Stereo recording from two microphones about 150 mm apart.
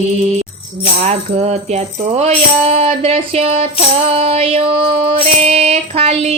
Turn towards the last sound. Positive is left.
turn(degrees=-45)  # may be behind; listen again after turning